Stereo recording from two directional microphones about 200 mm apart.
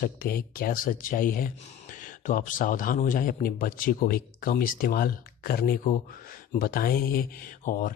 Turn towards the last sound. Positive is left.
turn(degrees=45)  # may be behind; listen again after turning